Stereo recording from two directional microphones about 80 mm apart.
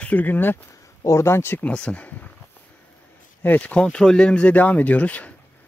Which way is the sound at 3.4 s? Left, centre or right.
Centre.